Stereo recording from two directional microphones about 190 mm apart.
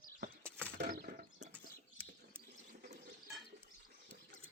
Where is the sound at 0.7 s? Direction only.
60° right (ahead or behind).